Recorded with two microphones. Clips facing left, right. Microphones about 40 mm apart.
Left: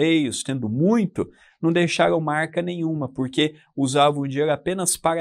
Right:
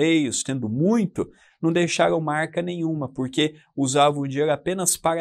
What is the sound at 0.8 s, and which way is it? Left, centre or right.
Speech, left.